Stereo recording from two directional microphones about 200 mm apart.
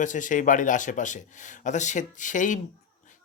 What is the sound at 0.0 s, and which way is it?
Speech, 40° left (ahead or behind).